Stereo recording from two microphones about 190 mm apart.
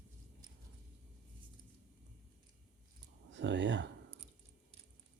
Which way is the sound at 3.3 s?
75° right (ahead or behind).